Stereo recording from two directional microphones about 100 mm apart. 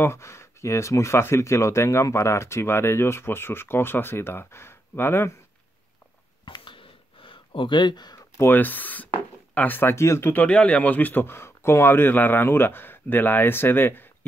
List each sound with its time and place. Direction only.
0.0 s speech: 25° left (ahead or behind)
6.4 s a sound: 55° left (ahead or behind)
8.4 s speech: 20° left (ahead or behind)
10.3 s speech: 10° left (ahead or behind)